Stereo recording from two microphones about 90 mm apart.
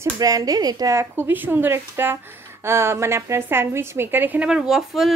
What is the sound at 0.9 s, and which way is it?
A woman's voice, 25° right (ahead or behind).